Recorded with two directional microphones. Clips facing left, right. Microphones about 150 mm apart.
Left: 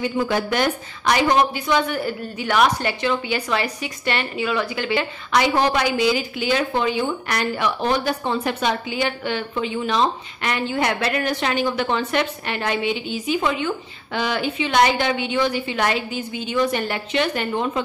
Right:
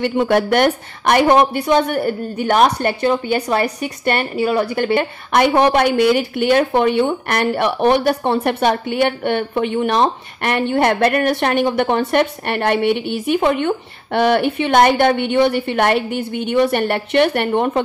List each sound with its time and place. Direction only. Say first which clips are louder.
0.3 s a woman's voice: right 7 dB; 60° right (ahead or behind)